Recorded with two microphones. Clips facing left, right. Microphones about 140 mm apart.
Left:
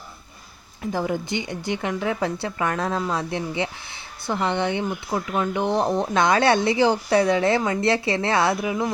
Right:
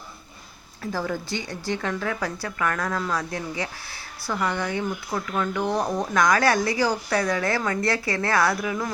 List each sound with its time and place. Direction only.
0.8 s speech: 20° left (ahead or behind)